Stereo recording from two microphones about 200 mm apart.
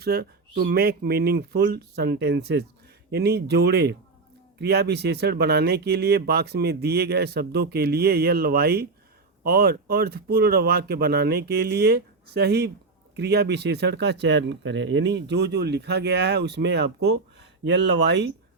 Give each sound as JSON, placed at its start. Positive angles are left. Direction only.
{"t": 0.0, "sound": "speech", "side_deg": -50}